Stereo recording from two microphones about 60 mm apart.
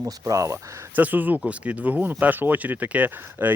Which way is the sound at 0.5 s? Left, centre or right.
Right.